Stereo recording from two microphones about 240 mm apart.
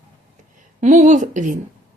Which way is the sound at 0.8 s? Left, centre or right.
Right.